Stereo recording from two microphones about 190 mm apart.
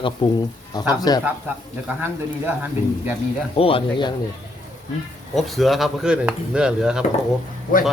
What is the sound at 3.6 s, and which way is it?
Speech, 30° left (ahead or behind).